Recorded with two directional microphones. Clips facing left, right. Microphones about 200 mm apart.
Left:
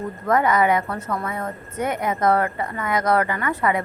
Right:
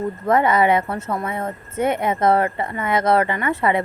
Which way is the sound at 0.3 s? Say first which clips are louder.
Right 2 dB; 25° right (ahead or behind).